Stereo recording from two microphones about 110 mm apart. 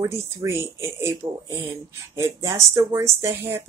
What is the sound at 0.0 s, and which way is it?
Speech, 25° right (ahead or behind).